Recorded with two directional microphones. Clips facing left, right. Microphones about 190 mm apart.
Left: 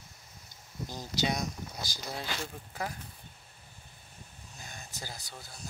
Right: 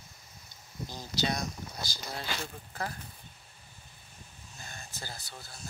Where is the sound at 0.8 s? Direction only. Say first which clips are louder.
Left 1 dB; 15° left (ahead or behind).